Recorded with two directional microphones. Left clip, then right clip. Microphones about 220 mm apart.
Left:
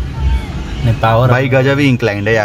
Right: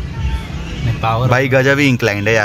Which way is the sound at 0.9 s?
40° left (ahead or behind).